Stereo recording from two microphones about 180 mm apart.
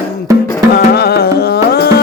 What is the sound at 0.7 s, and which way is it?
Music, 65° left (ahead or behind).